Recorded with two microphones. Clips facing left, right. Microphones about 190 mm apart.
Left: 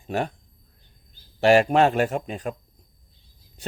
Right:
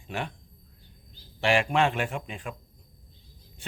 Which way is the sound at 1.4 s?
40° left (ahead or behind).